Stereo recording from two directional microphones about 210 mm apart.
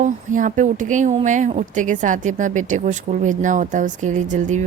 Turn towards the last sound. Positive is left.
turn(degrees=-35)  # may be behind; listen again after turning